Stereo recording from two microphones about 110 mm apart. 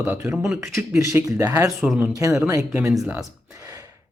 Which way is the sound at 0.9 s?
30° right (ahead or behind).